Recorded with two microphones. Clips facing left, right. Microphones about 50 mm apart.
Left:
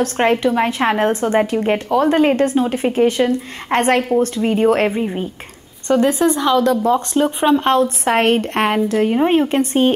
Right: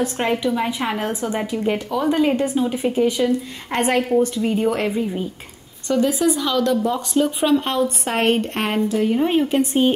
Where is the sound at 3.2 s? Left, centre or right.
Left.